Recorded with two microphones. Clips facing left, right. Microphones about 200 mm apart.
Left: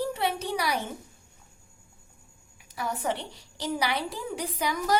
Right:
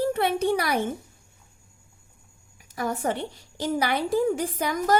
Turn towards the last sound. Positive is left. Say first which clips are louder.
# right 3 dB
turn(degrees=-50)  # may be behind; listen again after turning